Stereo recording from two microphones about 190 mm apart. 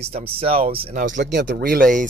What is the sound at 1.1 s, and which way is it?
Speech, 65° right (ahead or behind).